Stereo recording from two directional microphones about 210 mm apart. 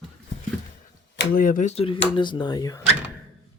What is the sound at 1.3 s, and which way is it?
Speech, 40° left (ahead or behind).